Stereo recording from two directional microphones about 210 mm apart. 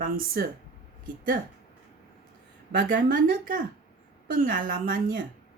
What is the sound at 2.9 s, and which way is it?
Speech, 45° right (ahead or behind).